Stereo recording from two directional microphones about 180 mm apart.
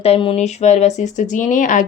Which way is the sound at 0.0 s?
30° left (ahead or behind).